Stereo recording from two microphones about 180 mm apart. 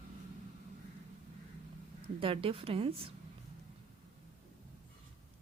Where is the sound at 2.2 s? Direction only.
30° right (ahead or behind).